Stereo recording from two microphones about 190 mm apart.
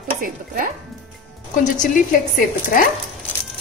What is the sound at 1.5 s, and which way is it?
Speech, 40° left (ahead or behind).